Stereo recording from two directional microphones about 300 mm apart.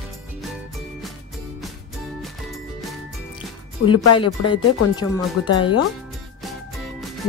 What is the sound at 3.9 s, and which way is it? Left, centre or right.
Speech, left.